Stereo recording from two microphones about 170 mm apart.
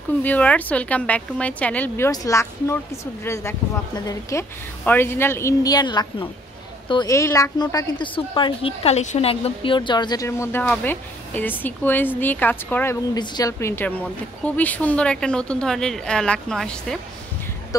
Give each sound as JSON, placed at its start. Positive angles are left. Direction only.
{"t": 0.2, "sound": "speech", "side_deg": 10}
{"t": 13.1, "sound": "speech", "side_deg": 25}